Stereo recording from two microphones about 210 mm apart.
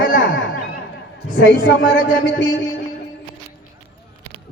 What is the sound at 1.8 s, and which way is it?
Speech, 40° left (ahead or behind).